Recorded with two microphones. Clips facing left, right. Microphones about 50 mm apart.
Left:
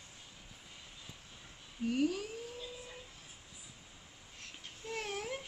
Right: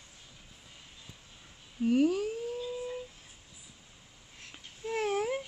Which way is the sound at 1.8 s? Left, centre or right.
Right.